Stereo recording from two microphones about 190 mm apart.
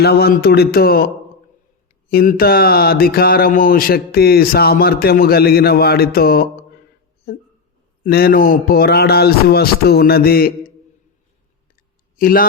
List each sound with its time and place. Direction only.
0.0 s a man's voice: 55° left (ahead or behind)
2.0 s a man's voice: 55° left (ahead or behind)
8.0 s a man's voice: 50° left (ahead or behind)
12.1 s a man's voice: 50° left (ahead or behind)